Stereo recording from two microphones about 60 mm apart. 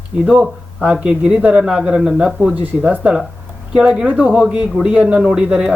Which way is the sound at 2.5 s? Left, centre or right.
Right.